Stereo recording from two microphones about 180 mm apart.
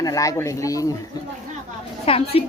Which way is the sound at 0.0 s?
20° left (ahead or behind).